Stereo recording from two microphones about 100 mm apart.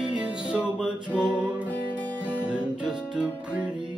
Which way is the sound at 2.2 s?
10° right (ahead or behind).